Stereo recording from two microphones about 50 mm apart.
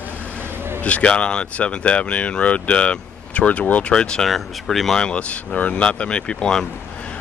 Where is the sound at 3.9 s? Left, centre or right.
Centre.